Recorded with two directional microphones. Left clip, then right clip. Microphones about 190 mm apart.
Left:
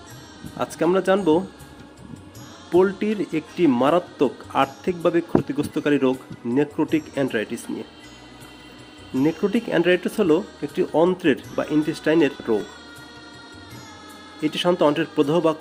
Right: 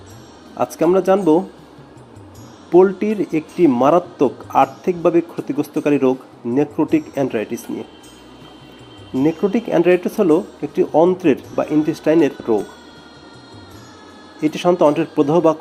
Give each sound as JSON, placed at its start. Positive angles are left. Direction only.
{"t": 0.5, "sound": "speech", "side_deg": 15}
{"t": 2.6, "sound": "speech", "side_deg": 15}
{"t": 9.1, "sound": "speech", "side_deg": 15}
{"t": 14.4, "sound": "a man's voice", "side_deg": 15}